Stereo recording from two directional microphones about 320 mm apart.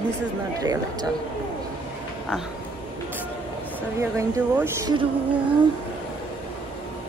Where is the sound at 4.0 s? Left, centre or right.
Centre.